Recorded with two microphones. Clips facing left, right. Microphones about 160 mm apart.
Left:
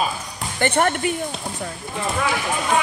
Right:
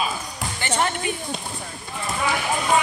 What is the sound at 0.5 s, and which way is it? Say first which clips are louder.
Speech: left 5 dB; 55° left (ahead or behind).